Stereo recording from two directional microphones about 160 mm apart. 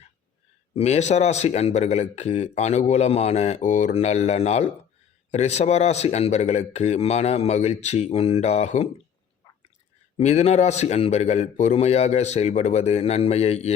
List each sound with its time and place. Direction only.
0.7 s speech: 40° left (ahead or behind)
10.2 s a man's voice: 40° left (ahead or behind)